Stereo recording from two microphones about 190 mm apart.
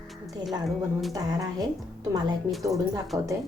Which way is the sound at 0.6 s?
Centre (ahead or behind).